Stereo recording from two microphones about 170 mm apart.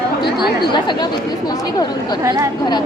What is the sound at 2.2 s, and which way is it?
Speech, 20° right (ahead or behind).